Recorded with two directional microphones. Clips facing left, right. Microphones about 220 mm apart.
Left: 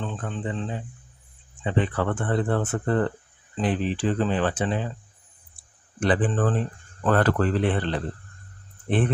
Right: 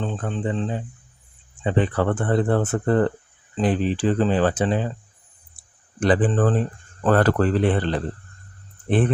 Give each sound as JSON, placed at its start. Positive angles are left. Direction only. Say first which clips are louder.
{"t": 0.0, "sound": "speech", "louder": "right 5 dB", "side_deg": -35}
{"t": 6.0, "sound": "speech", "louder": "right 4 dB", "side_deg": -40}